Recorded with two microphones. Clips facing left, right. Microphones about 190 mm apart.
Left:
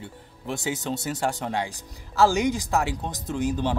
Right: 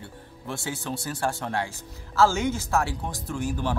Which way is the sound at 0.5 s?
20° left (ahead or behind).